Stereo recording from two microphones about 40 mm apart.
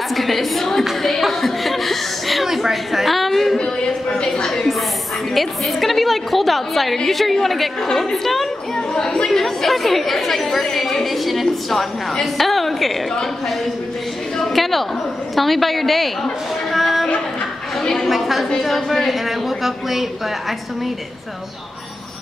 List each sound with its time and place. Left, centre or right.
0.1 s a woman's voice: centre
0.8 s chuckle: centre
3.5 s a sound: left
4.5 s a sound: centre
7.0 s a woman's voice: centre
8.7 s speech: centre
9.3 s a woman's voice: centre
14.4 s a sound: centre
15.3 s a woman's voice: centre
16.7 s a sound: centre
17.8 s a woman's voice: centre
18.1 s a woman's voice: centre